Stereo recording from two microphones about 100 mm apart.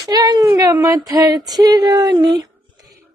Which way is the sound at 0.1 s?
45° right (ahead or behind).